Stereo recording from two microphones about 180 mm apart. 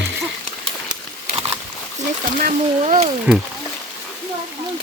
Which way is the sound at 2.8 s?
35° right (ahead or behind).